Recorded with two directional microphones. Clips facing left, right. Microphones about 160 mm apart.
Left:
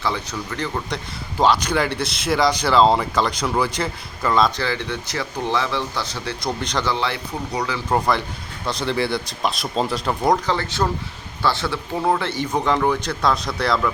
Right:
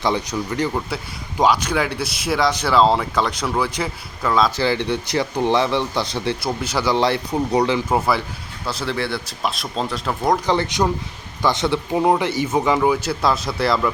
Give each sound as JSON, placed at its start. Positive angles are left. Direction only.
{"t": 0.0, "sound": "speech", "side_deg": -15}
{"t": 4.6, "sound": "speech", "side_deg": -15}
{"t": 6.4, "sound": "speech", "side_deg": -5}
{"t": 6.9, "sound": "speech", "side_deg": -35}
{"t": 7.9, "sound": "speech", "side_deg": -5}
{"t": 10.4, "sound": "speech", "side_deg": -15}